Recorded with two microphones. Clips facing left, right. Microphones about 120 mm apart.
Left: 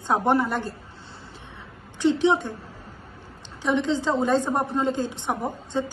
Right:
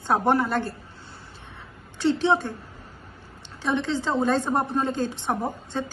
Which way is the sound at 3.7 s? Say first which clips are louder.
Left 2 dB; 15° left (ahead or behind).